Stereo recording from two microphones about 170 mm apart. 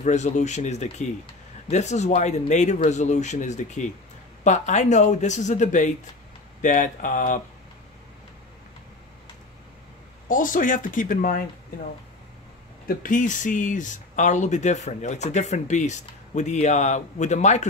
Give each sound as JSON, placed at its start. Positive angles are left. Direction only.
{"t": 0.0, "sound": "speech", "side_deg": 45}
{"t": 10.2, "sound": "speech", "side_deg": 50}
{"t": 12.8, "sound": "speech", "side_deg": 50}